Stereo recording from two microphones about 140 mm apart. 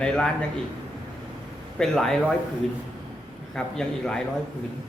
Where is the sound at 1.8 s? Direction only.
5° left (ahead or behind).